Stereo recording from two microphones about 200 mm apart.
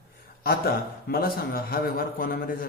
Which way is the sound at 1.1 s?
50° left (ahead or behind).